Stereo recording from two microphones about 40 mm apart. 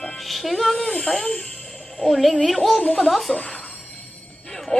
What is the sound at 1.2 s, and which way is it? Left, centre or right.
Music, centre.